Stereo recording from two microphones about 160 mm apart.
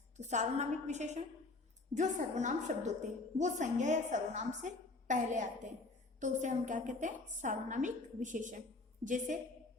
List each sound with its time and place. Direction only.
0.2 s a woman's voice: 45° right (ahead or behind)